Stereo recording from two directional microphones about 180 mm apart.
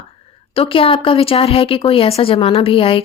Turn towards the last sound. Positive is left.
turn(degrees=30)  # may be behind; listen again after turning